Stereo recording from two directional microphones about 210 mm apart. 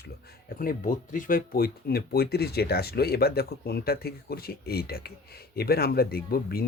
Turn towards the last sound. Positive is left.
turn(degrees=45)  # may be behind; listen again after turning